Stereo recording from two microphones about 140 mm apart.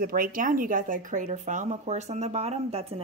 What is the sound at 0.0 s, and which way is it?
Speech, 90° right.